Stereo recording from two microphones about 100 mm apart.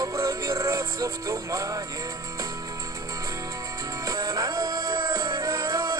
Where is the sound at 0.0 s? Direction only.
35° right (ahead or behind).